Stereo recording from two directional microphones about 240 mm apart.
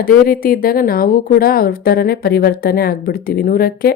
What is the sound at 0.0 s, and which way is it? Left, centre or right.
Speech, left.